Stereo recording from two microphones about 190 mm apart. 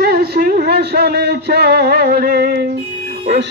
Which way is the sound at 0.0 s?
55° right (ahead or behind).